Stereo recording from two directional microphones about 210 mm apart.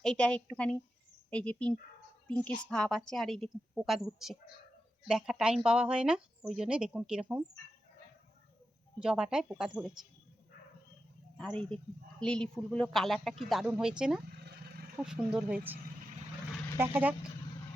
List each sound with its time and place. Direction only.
0.0 s a woman's voice: 5° left (ahead or behind)
9.0 s a woman's voice: 5° right (ahead or behind)
11.3 s a woman's voice: 5° left (ahead or behind)
14.4 s a sound: 50° right (ahead or behind)
15.0 s a woman's voice: 5° right (ahead or behind)